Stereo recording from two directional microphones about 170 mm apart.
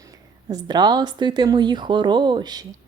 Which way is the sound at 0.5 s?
25° right (ahead or behind).